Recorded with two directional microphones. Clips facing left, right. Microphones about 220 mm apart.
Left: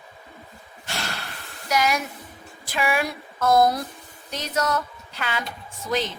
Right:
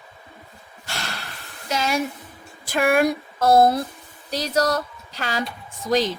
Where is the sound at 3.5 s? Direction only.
30° right (ahead or behind).